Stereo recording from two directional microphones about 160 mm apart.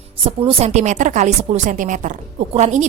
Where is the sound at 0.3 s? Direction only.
35° right (ahead or behind).